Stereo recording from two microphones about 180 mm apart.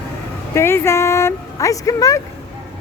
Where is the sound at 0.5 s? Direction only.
15° left (ahead or behind).